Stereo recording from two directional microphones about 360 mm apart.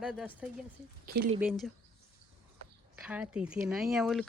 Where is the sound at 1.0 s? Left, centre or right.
Right.